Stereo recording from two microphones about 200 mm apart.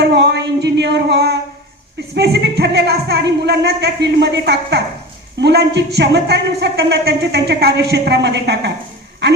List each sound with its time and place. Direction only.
0.0 s a man's voice: 55° right (ahead or behind)